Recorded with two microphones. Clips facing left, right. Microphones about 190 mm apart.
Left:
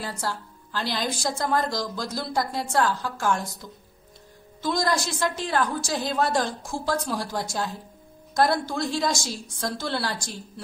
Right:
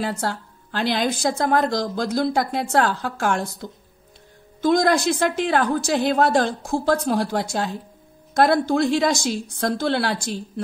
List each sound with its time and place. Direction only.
0.0 s a woman's voice: 65° right (ahead or behind)
4.6 s a woman's voice: 55° right (ahead or behind)